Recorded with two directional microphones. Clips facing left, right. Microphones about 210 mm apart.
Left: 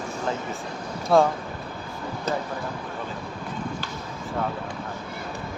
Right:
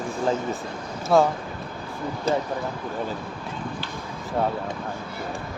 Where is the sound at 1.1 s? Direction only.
Centre (ahead or behind).